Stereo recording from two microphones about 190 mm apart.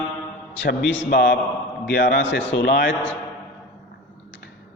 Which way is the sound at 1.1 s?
55° left (ahead or behind).